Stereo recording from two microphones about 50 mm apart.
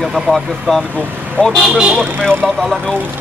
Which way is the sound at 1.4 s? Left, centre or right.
Left.